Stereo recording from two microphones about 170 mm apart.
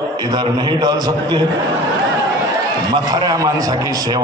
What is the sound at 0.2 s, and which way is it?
A man's voice, 25° right (ahead or behind).